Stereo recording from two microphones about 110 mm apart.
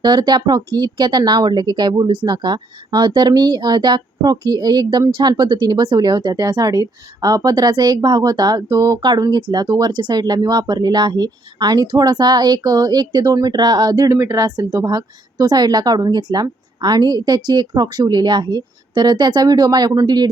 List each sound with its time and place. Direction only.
0.0 s speech: 40° right (ahead or behind)